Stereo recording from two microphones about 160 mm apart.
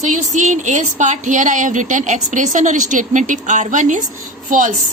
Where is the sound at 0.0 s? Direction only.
50° right (ahead or behind).